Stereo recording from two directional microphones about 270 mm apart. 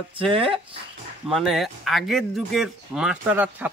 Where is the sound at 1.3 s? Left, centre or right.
Centre.